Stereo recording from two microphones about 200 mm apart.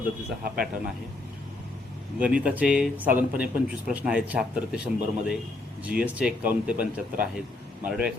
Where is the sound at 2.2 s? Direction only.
5° right (ahead or behind).